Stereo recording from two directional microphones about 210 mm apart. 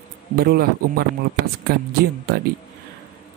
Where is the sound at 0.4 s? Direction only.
45° right (ahead or behind).